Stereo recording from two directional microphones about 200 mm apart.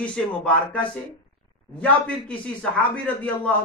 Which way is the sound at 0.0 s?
5° left (ahead or behind).